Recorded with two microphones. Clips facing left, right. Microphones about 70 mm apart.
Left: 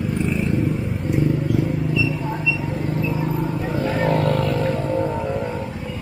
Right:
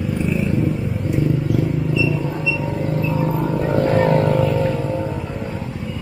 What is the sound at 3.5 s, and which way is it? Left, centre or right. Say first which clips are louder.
Wild animals: right 5 dB; centre.